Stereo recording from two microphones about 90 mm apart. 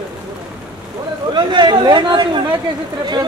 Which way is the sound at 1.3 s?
55° right (ahead or behind).